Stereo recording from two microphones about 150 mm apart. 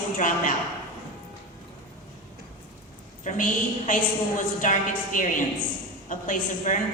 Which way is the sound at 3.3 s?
60° left (ahead or behind).